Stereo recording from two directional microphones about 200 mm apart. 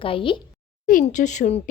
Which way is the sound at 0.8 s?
40° left (ahead or behind).